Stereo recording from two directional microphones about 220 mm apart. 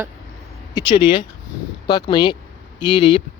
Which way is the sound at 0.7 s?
20° left (ahead or behind).